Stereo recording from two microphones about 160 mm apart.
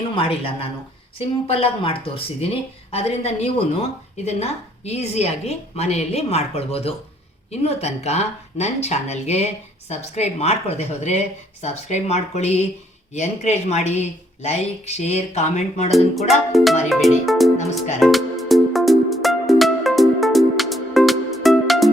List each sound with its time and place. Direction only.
0.2 s a woman's voice: 35° left (ahead or behind)
15.9 s speech: centre (ahead or behind)
18.0 s music: centre (ahead or behind)